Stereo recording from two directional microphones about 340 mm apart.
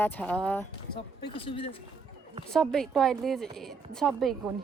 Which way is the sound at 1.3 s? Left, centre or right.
Centre.